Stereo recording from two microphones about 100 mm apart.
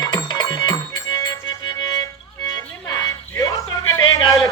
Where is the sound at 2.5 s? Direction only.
35° left (ahead or behind).